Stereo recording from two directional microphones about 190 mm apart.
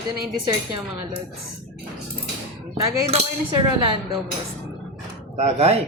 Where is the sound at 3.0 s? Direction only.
30° right (ahead or behind).